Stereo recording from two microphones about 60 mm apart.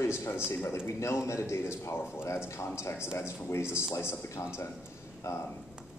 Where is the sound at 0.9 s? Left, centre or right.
Left.